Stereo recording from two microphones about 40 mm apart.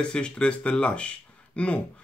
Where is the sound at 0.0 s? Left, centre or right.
Left.